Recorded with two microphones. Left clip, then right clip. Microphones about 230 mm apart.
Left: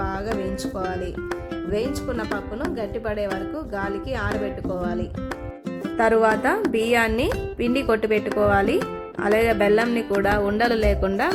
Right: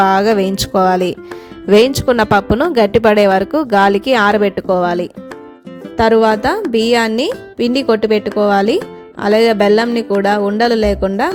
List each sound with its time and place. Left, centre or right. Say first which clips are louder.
0.0 s a woman's voice: right 16 dB; right